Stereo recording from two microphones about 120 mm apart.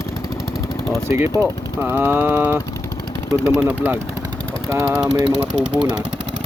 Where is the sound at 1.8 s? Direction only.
20° right (ahead or behind).